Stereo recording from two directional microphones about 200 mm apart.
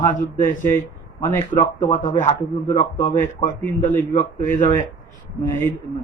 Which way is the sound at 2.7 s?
15° left (ahead or behind).